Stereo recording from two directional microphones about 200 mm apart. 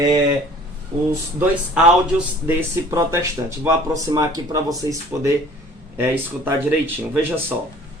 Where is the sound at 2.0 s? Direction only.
10° right (ahead or behind).